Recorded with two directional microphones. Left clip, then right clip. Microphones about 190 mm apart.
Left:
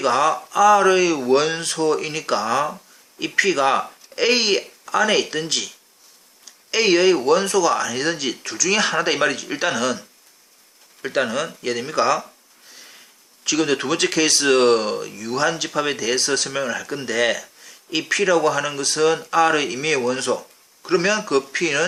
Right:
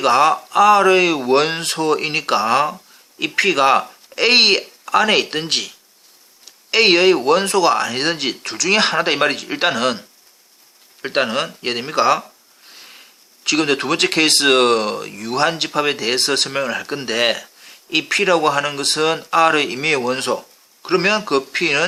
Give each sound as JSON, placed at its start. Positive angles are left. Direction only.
{"t": 0.0, "sound": "speech", "side_deg": -25}
{"t": 6.7, "sound": "speech", "side_deg": -25}
{"t": 11.0, "sound": "speech", "side_deg": -25}
{"t": 13.4, "sound": "speech", "side_deg": -25}